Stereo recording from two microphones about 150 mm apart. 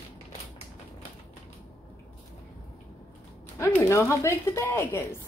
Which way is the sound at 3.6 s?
20° left (ahead or behind).